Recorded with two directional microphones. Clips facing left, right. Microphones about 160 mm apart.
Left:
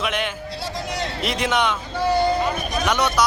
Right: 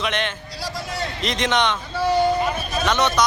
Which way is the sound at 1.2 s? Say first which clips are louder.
Right 1 dB; 5° left (ahead or behind).